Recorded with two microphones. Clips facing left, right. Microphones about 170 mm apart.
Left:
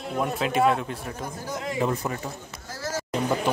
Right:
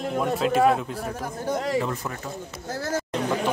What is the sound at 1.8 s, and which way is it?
Speech, 15° left (ahead or behind).